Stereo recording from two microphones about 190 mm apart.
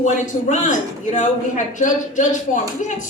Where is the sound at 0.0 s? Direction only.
40° left (ahead or behind).